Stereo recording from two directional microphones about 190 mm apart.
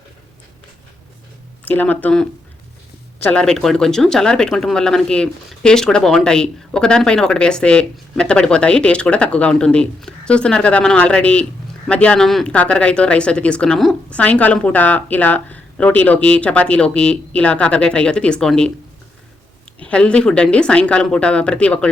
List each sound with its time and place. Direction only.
1.6 s speech: 10° left (ahead or behind)
3.2 s speech: 5° left (ahead or behind)
19.8 s speech: 5° left (ahead or behind)